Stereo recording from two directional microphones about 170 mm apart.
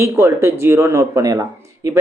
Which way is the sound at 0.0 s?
15° right (ahead or behind).